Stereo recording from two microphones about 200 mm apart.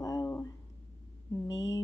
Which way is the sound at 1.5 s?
65° left (ahead or behind).